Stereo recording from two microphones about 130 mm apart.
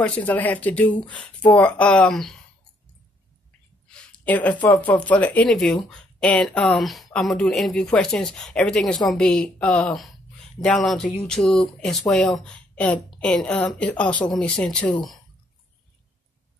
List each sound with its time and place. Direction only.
0.2 s a woman's voice: 10° left (ahead or behind)
3.9 s a woman's voice: 10° left (ahead or behind)